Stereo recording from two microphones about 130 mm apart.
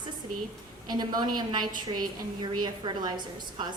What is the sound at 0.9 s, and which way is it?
Speech, 35° right (ahead or behind).